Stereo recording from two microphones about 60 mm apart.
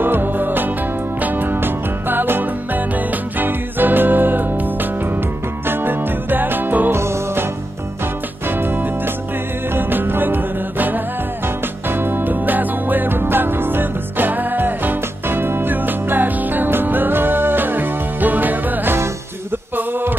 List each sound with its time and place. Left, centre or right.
0.0 s music: right
6.9 s music: right
8.5 s music: right
19.7 s a sound: right